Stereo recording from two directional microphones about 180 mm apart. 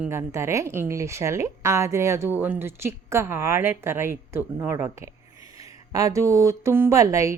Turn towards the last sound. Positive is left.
turn(degrees=-15)  # may be behind; listen again after turning